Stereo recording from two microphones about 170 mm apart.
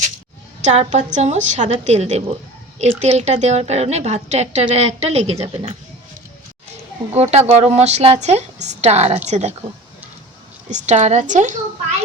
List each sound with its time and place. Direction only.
0.6 s a woman's voice: 40° right (ahead or behind)
7.1 s a woman's voice: 40° right (ahead or behind)
10.7 s a woman's voice: 45° right (ahead or behind)